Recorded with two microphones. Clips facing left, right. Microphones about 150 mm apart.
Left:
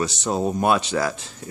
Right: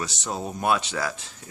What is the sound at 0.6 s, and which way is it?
Speech, 30° left (ahead or behind).